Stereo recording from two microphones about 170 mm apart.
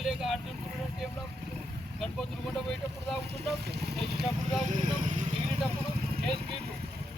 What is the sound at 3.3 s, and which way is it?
Speech, 70° right (ahead or behind).